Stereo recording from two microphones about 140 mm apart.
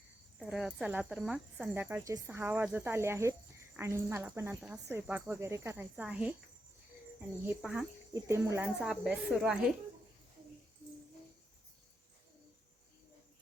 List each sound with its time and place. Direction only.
0.5 s speech: 5° right (ahead or behind)
7.6 s a woman's voice: 5° right (ahead or behind)
8.1 s speech: 20° right (ahead or behind)
8.8 s a woman's voice: centre (ahead or behind)